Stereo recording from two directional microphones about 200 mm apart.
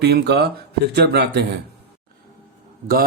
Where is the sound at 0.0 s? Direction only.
55° right (ahead or behind).